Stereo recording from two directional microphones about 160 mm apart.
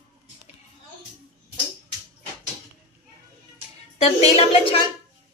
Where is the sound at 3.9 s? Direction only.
40° left (ahead or behind).